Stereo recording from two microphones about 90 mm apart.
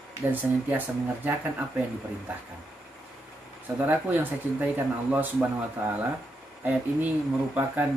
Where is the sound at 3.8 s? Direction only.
20° right (ahead or behind).